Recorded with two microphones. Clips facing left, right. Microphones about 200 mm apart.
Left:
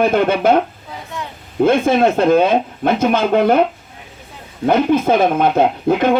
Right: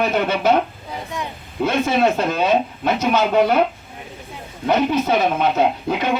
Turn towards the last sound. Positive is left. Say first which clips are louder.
# left 5 dB
turn(degrees=50)  # may be behind; listen again after turning